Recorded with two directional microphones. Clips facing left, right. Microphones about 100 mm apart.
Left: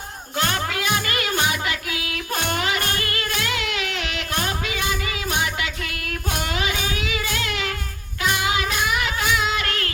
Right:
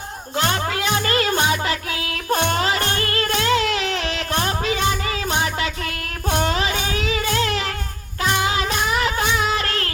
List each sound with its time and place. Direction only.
0.3 s music: 30° right (ahead or behind)